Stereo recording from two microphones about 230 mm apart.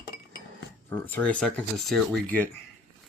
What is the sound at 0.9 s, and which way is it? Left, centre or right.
Speech, centre.